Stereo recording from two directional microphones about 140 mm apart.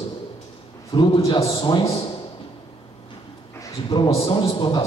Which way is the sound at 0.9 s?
35° left (ahead or behind).